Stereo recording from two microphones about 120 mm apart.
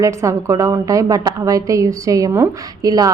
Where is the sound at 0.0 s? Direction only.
25° right (ahead or behind).